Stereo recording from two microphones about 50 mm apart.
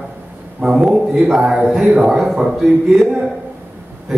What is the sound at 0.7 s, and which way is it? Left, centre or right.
A man's voice, centre.